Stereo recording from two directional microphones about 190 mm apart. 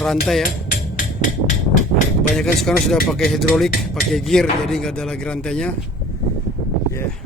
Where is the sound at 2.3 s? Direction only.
Centre (ahead or behind).